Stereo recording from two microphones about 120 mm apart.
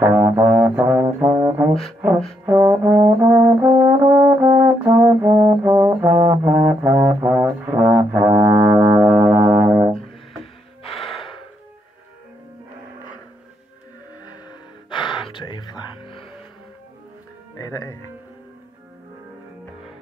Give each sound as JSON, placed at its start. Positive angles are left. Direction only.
{"t": 0.0, "sound": "brass instrument", "side_deg": -15}
{"t": 1.7, "sound": "music", "side_deg": 0}
{"t": 2.4, "sound": "brass instrument", "side_deg": -15}
{"t": 8.2, "sound": "music", "side_deg": -15}
{"t": 15.1, "sound": "music", "side_deg": 40}
{"t": 17.6, "sound": "music", "side_deg": 30}